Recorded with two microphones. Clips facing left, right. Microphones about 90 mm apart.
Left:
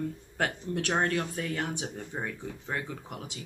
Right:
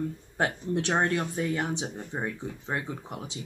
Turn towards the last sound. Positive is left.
turn(degrees=-25)  # may be behind; listen again after turning